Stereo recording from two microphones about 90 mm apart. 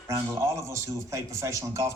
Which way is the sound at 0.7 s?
35° right (ahead or behind).